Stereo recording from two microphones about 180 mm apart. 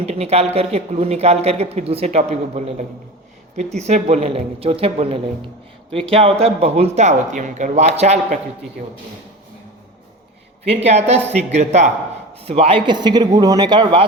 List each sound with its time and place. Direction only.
0.0 s speech: 35° right (ahead or behind)
10.6 s a man's voice: 35° right (ahead or behind)